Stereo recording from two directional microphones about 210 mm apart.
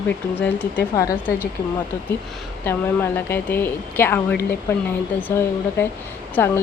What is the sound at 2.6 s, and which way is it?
Speech, 10° left (ahead or behind).